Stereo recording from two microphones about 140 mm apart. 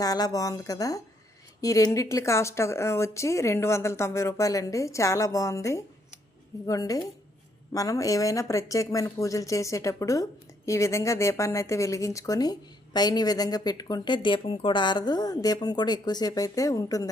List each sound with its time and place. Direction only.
0.0 s speech: 25° left (ahead or behind)